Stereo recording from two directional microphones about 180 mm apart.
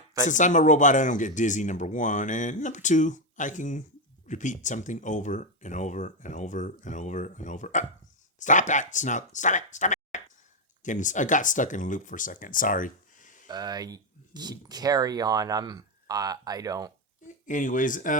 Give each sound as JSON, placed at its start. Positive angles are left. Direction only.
{"t": 0.3, "sound": "speech", "side_deg": 45}
{"t": 13.5, "sound": "speech", "side_deg": -20}
{"t": 17.4, "sound": "speech", "side_deg": 45}